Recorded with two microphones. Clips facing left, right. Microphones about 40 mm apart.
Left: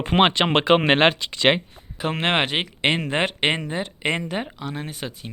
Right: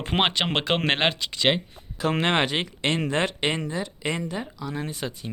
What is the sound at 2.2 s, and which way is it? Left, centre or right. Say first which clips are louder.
Speech: left 2 dB; centre.